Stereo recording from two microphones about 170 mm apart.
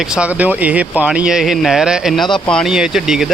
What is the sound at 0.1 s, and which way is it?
Speech, 5° right (ahead or behind).